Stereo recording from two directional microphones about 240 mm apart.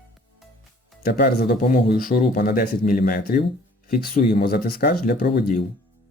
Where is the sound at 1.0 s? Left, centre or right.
Left.